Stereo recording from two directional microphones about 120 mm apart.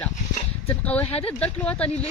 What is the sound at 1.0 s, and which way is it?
Speech, 55° left (ahead or behind).